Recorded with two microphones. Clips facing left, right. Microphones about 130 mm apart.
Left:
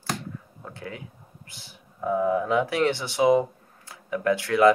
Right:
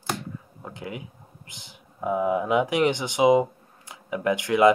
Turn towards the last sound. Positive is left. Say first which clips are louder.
# even
turn(degrees=-20)  # may be behind; listen again after turning